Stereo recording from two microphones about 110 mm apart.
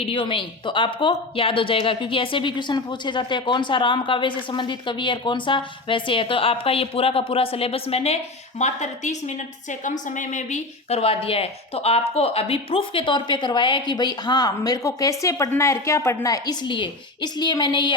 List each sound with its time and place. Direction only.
0.0 s speech: 50° left (ahead or behind); by 9.1 s 90° left
10.5 s speech: 70° left (ahead or behind); by 16.6 s 30° left (ahead or behind)
16.6 s speech: 45° left (ahead or behind)